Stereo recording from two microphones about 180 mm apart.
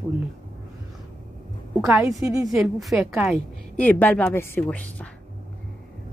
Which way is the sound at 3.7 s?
10° left (ahead or behind).